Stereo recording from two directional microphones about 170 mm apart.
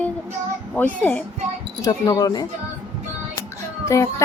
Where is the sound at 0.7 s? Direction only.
10° left (ahead or behind).